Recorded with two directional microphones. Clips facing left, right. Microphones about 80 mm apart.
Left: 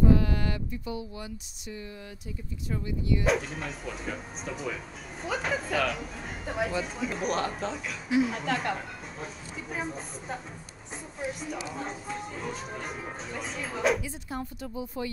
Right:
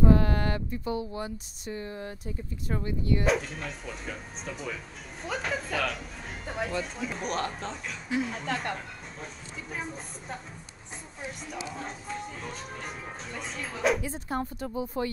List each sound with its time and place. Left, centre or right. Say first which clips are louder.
0.1 s speech: right 1 dB; right
3.3 s speech: even; centre
14.0 s speech: right 4 dB; right